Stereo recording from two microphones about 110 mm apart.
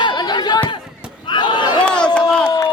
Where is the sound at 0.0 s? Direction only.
40° left (ahead or behind).